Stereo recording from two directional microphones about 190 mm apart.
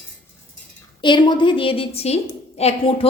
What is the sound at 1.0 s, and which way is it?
A woman's voice, 25° left (ahead or behind).